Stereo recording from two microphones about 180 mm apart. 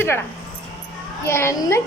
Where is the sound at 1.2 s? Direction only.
15° left (ahead or behind).